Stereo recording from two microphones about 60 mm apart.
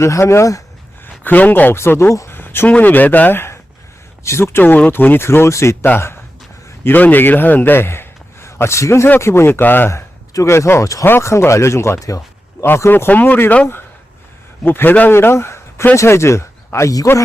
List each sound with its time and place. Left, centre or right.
0.0 s speech: left
1.2 s speech: left
1.7 s speech: left
2.6 s speech: left
4.9 s speech: left
6.8 s a man's voice: left
9.9 s speech: left
13.1 s speech: left